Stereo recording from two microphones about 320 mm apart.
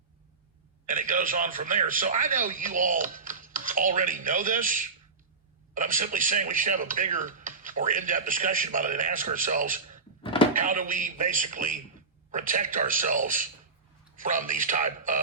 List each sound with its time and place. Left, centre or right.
0.9 s speech: right